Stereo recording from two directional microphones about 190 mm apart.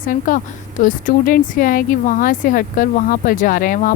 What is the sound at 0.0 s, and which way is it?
Speech, 45° left (ahead or behind).